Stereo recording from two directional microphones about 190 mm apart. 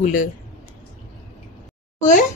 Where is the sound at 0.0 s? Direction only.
45° left (ahead or behind).